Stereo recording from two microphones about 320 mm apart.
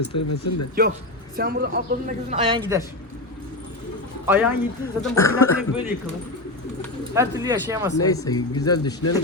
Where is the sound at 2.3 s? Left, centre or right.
Centre.